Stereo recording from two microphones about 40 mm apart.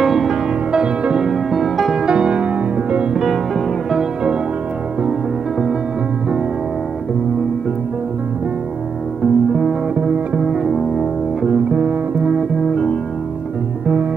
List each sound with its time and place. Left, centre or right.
0.0 s music: centre
0.7 s music: right
1.5 s music: centre
2.0 s music: right
9.2 s music: centre
9.9 s music: right
10.4 s music: centre
11.4 s music: right
12.4 s music: centre